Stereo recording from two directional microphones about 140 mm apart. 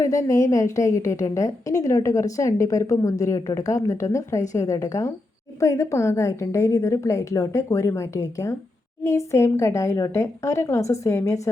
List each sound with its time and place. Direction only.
0.0 s a woman's voice: 25° left (ahead or behind)